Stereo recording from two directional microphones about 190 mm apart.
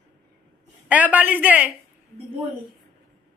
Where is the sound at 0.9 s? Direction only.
10° right (ahead or behind).